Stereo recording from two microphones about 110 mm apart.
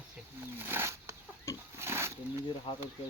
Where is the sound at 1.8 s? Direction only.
25° right (ahead or behind).